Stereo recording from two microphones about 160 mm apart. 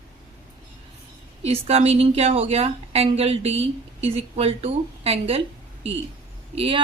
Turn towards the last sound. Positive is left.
turn(degrees=-35)  # may be behind; listen again after turning